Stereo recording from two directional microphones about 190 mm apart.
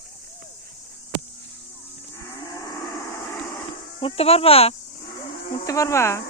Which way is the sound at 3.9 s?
30° left (ahead or behind).